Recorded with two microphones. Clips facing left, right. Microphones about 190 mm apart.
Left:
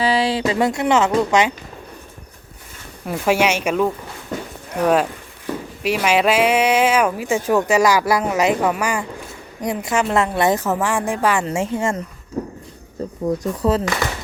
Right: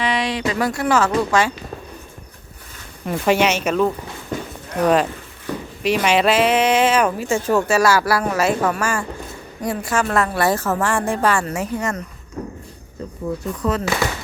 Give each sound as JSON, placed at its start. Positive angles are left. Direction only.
{"t": 0.0, "sound": "speech", "side_deg": 30}
{"t": 3.1, "sound": "a woman's voice", "side_deg": 10}
{"t": 11.4, "sound": "a woman's voice", "side_deg": 25}
{"t": 13.2, "sound": "speech", "side_deg": 35}